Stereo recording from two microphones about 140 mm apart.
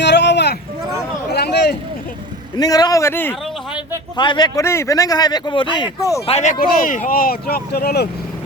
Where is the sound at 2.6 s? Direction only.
25° left (ahead or behind).